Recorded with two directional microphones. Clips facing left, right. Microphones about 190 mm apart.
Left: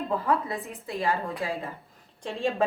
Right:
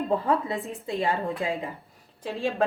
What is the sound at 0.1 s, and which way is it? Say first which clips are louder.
A woman's voice: right 1 dB; 25° right (ahead or behind).